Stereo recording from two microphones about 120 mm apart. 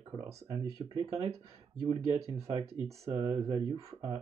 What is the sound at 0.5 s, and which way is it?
Speech, 45° right (ahead or behind).